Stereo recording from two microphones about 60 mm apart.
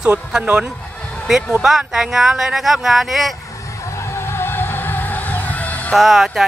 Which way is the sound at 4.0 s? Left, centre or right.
Left.